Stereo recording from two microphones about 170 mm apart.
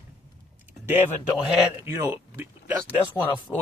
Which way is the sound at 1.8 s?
15° right (ahead or behind).